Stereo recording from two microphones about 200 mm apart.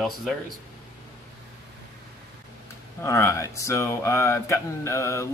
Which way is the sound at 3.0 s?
15° left (ahead or behind).